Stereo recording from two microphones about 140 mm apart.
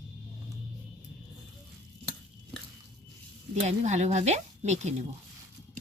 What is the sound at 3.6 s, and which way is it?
Speech, 55° right (ahead or behind).